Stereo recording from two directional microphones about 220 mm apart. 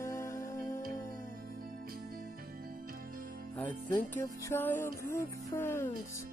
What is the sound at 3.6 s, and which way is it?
Music, 10° left (ahead or behind).